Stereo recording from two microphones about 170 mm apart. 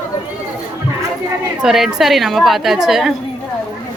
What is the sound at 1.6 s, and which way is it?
A woman's voice, 5° right (ahead or behind).